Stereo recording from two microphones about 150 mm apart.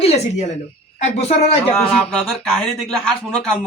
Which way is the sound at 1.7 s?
5° left (ahead or behind).